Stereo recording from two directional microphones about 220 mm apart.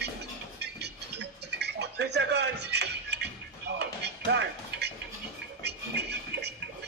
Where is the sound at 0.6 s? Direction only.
50° right (ahead or behind).